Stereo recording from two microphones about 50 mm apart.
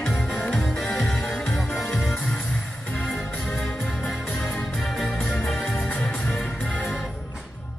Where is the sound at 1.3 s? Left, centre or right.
Left.